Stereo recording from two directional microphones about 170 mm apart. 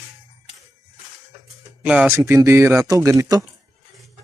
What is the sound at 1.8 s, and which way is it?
A man's voice, 5° right (ahead or behind).